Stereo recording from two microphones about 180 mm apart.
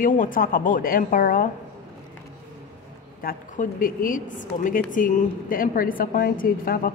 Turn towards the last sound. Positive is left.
turn(degrees=50)  # may be behind; listen again after turning